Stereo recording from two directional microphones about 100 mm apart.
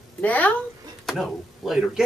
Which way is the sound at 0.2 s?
15° left (ahead or behind).